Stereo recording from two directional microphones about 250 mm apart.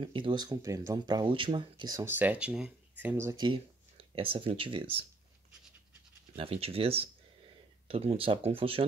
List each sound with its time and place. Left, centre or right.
0.0 s speech: centre
6.3 s speech: right